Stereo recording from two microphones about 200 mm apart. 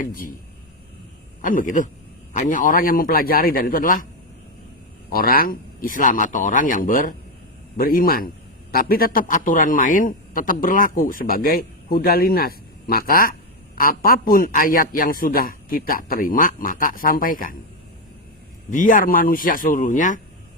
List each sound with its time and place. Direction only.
0.0 s a man's voice: 45° left (ahead or behind)
1.4 s a man's voice: 40° left (ahead or behind)
5.1 s a man's voice: 45° left (ahead or behind)
18.7 s a man's voice: 40° left (ahead or behind)